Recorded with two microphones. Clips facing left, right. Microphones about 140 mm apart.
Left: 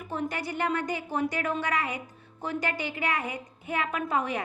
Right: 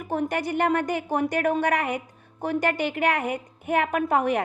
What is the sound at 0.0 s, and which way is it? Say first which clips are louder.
A woman's voice: right 6 dB; 55° right (ahead or behind).